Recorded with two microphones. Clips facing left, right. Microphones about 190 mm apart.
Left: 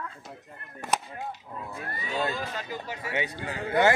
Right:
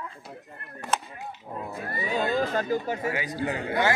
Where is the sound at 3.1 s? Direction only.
25° left (ahead or behind).